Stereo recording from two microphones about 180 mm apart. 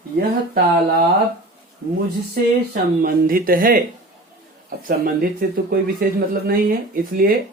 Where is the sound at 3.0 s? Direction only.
50° right (ahead or behind).